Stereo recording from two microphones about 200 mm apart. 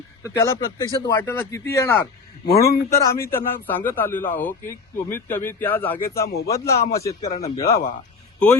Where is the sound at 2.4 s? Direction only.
50° left (ahead or behind).